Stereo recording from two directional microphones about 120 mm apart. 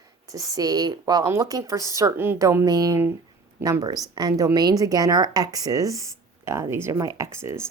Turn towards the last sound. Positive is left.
turn(degrees=-20)  # may be behind; listen again after turning